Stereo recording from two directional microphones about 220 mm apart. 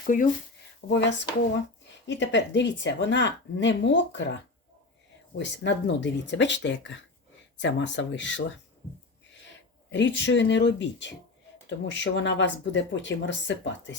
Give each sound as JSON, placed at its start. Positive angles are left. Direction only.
{"t": 0.1, "sound": "speech", "side_deg": 35}
{"t": 0.9, "sound": "speech", "side_deg": 55}
{"t": 5.4, "sound": "speech", "side_deg": 55}
{"t": 9.9, "sound": "speech", "side_deg": 55}